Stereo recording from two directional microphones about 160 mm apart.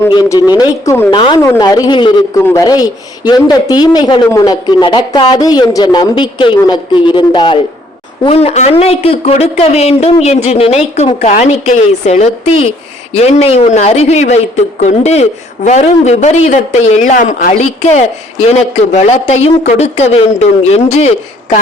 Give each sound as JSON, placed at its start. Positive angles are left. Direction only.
{"t": 0.1, "sound": "speech", "side_deg": 25}